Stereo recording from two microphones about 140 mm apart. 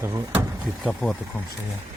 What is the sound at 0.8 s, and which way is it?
Speech, 5° left (ahead or behind).